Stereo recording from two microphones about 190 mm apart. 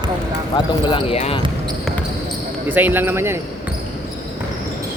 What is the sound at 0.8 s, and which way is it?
Speech, 30° left (ahead or behind).